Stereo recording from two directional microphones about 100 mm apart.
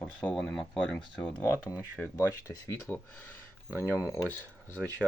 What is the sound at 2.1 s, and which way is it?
Speech, 35° left (ahead or behind).